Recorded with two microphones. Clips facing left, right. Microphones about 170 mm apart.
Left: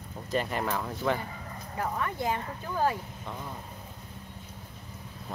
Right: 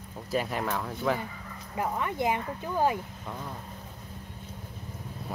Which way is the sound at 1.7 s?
20° right (ahead or behind).